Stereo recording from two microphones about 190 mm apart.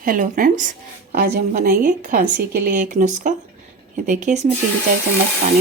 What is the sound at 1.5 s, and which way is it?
Speech, 45° right (ahead or behind).